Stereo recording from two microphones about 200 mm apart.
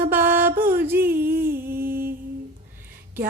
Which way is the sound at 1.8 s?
45° right (ahead or behind).